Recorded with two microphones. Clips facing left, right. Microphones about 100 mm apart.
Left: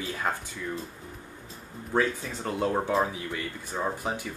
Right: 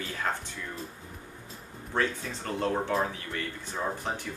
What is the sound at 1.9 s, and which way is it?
Speech, 10° left (ahead or behind).